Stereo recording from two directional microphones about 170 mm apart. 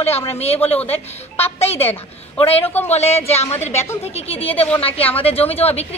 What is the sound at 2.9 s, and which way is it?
Speech, 40° left (ahead or behind).